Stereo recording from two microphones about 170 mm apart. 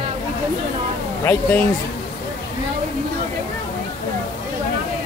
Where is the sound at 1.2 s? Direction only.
10° left (ahead or behind).